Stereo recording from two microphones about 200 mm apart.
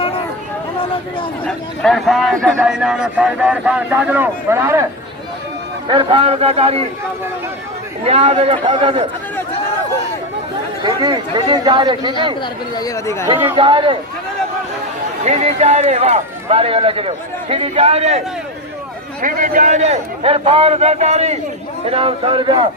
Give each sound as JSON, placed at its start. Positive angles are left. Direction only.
{"t": 1.5, "sound": "a man's voice", "side_deg": 5}
{"t": 5.9, "sound": "speech", "side_deg": -25}
{"t": 8.0, "sound": "speech", "side_deg": -30}
{"t": 10.8, "sound": "speech", "side_deg": -20}
{"t": 12.4, "sound": "speech", "side_deg": 15}
{"t": 13.6, "sound": "speech", "side_deg": -25}
{"t": 15.2, "sound": "speech", "side_deg": -35}
{"t": 19.2, "sound": "speech", "side_deg": -40}